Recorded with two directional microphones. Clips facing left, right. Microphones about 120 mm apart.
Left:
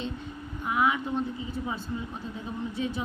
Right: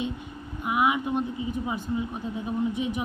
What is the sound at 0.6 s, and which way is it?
Speech, 15° right (ahead or behind).